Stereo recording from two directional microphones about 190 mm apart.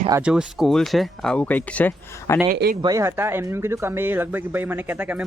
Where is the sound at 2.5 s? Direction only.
55° right (ahead or behind).